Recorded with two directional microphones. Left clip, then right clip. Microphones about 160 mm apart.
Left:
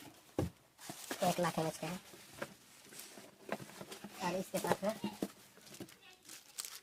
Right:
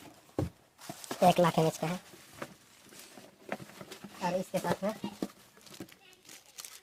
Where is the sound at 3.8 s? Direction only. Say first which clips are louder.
Right 3 dB; 30° right (ahead or behind).